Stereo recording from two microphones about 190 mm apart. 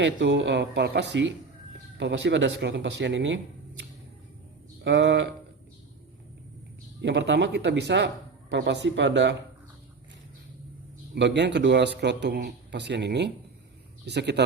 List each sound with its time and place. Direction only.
0.0 s speech: 70° right (ahead or behind)
7.0 s speech: 65° right (ahead or behind)
11.1 s a man's voice: 65° right (ahead or behind)